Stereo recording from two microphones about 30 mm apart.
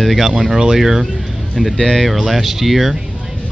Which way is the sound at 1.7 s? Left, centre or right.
Centre.